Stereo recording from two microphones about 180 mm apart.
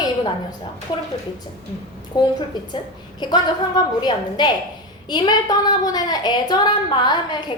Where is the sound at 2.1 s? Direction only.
25° left (ahead or behind).